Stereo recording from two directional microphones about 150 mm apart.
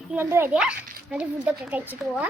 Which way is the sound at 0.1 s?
15° right (ahead or behind).